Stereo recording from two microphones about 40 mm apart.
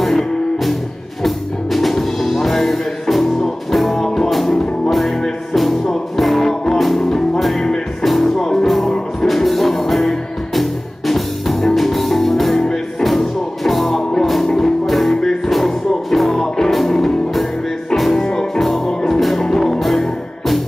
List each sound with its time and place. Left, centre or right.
0.0 s music: centre
8.4 s music: centre
8.6 s music: centre
18.2 s music: centre
18.9 s music: centre